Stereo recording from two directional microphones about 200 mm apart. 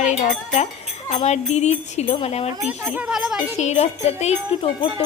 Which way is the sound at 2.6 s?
5° right (ahead or behind).